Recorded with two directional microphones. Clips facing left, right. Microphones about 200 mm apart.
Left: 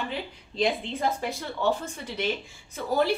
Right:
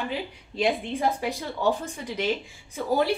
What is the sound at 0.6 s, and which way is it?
A woman's voice, 10° right (ahead or behind).